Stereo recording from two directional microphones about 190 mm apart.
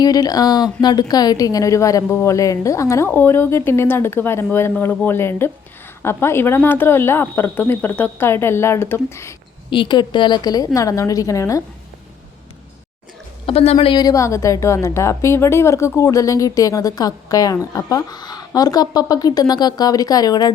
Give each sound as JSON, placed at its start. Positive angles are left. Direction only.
{"t": 0.0, "sound": "speech", "side_deg": 20}
{"t": 9.6, "sound": "a woman's voice", "side_deg": 25}
{"t": 13.4, "sound": "a woman's voice", "side_deg": 30}